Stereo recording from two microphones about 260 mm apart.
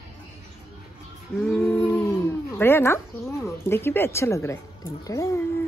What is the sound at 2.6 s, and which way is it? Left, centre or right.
Speech, centre.